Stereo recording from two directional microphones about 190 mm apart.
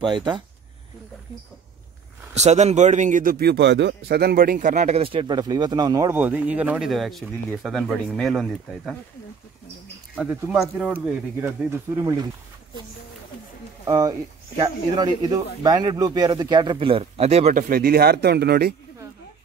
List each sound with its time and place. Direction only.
0.0 s speech: 25° right (ahead or behind)
2.3 s speech: 35° right (ahead or behind); by 8.9 s centre (ahead or behind)
10.1 s speech: centre (ahead or behind); by 12.3 s 20° right (ahead or behind)
13.8 s speech: 20° right (ahead or behind); by 18.8 s 60° right (ahead or behind)